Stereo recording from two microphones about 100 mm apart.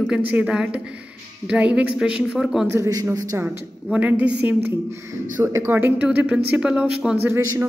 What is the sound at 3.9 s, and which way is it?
A man's voice, 15° right (ahead or behind).